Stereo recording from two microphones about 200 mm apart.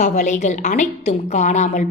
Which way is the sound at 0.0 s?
35° left (ahead or behind).